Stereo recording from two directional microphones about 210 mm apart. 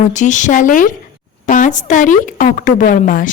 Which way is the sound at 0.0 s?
35° left (ahead or behind).